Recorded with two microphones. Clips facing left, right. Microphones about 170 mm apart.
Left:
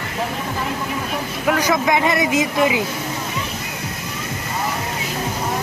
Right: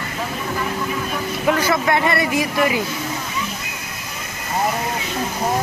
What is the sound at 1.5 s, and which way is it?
Vehicle, 15° left (ahead or behind).